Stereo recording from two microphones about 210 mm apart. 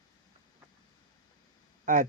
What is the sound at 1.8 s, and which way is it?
Speech, 40° right (ahead or behind).